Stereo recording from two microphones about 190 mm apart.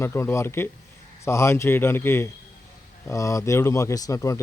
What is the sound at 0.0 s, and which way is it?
A man's voice, 15° left (ahead or behind).